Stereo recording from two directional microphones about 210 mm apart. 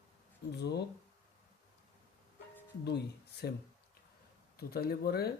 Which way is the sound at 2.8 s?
50° left (ahead or behind).